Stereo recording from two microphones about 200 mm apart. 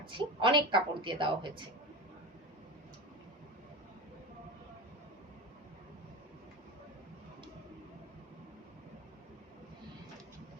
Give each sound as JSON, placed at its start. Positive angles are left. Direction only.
{"t": 0.0, "sound": "a woman's voice", "side_deg": -25}